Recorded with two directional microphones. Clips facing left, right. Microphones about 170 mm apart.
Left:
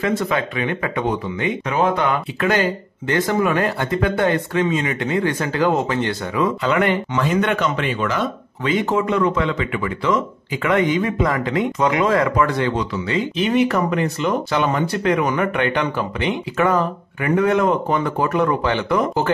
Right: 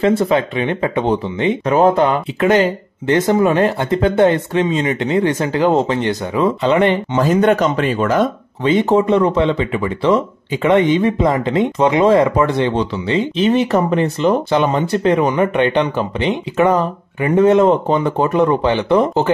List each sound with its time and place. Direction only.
0.0 s speech: 30° right (ahead or behind)
7.2 s speech: 40° right (ahead or behind)
8.6 s speech: 30° right (ahead or behind)